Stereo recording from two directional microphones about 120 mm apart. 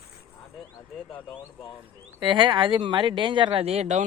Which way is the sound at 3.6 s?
65° right (ahead or behind).